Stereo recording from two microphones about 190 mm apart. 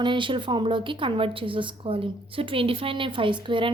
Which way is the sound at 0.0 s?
25° right (ahead or behind).